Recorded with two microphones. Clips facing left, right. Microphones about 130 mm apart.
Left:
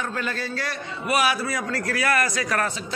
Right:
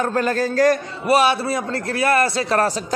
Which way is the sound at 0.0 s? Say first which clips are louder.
Right 9 dB; 45° right (ahead or behind).